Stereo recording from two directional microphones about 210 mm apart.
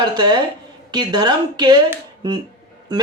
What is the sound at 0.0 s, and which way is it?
A woman's voice, 20° right (ahead or behind).